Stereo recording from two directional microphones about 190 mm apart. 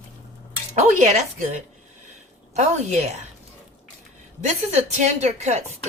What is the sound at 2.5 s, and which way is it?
Speech, 35° right (ahead or behind).